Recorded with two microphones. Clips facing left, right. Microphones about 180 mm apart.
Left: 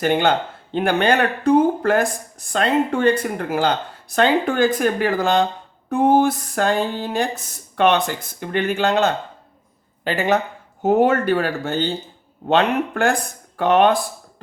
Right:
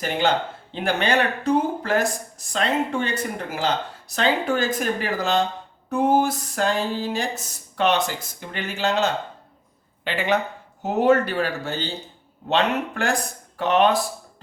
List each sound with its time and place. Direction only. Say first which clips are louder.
0.0 s speech: left 4 dB; 60° left (ahead or behind)
4.1 s speech: left 4 dB; 55° left (ahead or behind)
10.0 s speech: left 3 dB; 40° left (ahead or behind)